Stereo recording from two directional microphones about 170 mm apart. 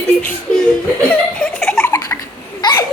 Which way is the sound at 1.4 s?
5° left (ahead or behind).